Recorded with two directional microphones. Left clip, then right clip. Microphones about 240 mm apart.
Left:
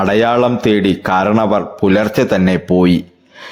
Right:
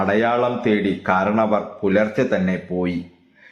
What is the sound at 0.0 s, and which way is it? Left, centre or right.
A man's voice, left.